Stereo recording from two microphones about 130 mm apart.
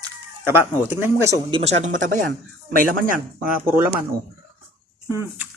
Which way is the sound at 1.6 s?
60° right (ahead or behind).